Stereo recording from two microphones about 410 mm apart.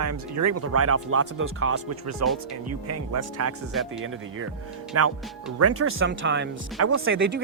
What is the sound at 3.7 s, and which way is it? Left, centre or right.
Speech, centre.